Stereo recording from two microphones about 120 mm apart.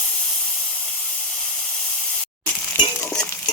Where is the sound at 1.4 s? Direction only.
5° left (ahead or behind).